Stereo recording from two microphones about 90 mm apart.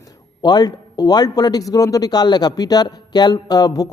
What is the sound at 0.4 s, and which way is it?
Speech, 50° left (ahead or behind).